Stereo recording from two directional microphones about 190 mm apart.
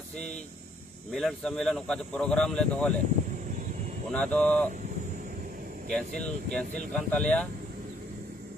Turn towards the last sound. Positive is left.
turn(degrees=5)  # may be behind; listen again after turning